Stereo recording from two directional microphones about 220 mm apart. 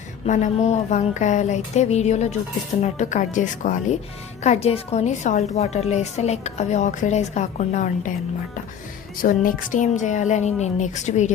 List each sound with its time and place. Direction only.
0.3 s a woman's voice: 30° left (ahead or behind)
9.2 s a woman's voice: 40° left (ahead or behind)